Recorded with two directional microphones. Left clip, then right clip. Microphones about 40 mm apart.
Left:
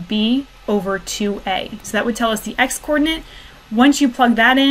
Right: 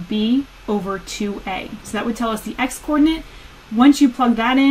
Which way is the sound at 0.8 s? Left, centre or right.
Left.